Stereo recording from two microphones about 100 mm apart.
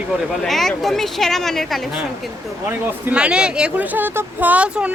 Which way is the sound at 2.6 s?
15° right (ahead or behind).